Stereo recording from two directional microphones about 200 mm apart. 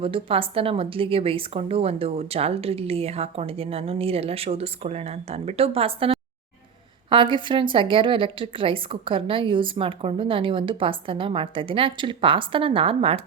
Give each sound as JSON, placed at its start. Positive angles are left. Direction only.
{"t": 0.0, "sound": "speech", "side_deg": -25}